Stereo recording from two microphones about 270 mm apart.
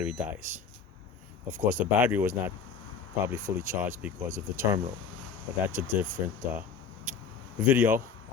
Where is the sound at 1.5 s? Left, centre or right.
Right.